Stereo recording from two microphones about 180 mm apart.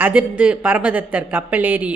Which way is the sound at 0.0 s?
10° right (ahead or behind).